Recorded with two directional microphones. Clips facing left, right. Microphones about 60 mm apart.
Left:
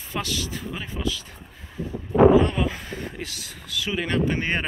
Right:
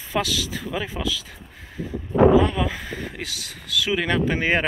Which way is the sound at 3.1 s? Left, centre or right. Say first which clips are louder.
Right 2 dB; right.